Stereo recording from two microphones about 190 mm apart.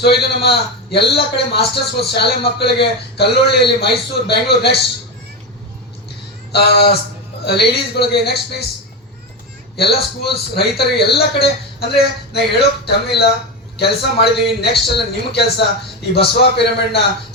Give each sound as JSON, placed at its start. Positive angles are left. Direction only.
{"t": 0.0, "sound": "a man's voice", "side_deg": 60}
{"t": 6.5, "sound": "a man's voice", "side_deg": 60}
{"t": 9.7, "sound": "a man's voice", "side_deg": 60}